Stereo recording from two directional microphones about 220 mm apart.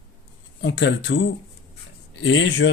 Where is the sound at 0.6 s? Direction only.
55° left (ahead or behind).